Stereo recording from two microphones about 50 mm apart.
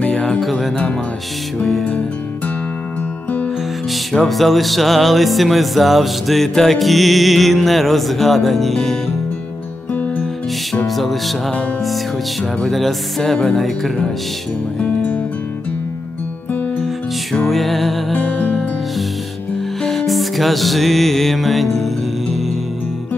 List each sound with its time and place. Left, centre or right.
0.0 s music: centre
3.9 s music: centre
11.0 s music: centre
12.6 s music: centre
17.5 s music: centre
18.1 s music: left
19.8 s music: centre